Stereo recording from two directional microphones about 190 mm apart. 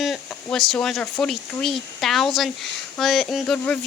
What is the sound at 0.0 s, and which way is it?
Speech, centre (ahead or behind).